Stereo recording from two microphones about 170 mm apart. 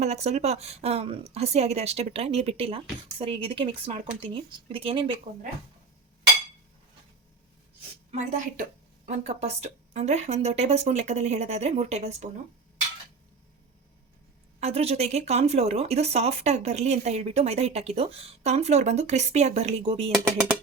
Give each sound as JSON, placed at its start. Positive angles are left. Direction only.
{"t": 0.0, "sound": "speech", "side_deg": -40}
{"t": 9.0, "sound": "speech", "side_deg": -40}
{"t": 14.6, "sound": "speech", "side_deg": -35}